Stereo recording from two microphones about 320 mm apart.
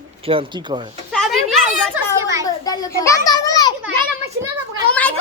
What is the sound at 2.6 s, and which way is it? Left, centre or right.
A child's voice, centre.